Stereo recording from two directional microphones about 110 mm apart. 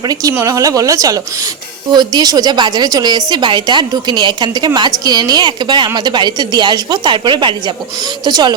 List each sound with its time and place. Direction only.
0.1 s a woman's voice: 35° right (ahead or behind)